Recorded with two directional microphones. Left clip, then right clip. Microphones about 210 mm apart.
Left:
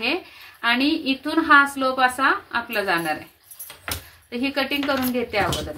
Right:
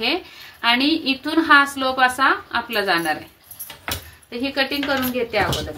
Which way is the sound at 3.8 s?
30° left (ahead or behind).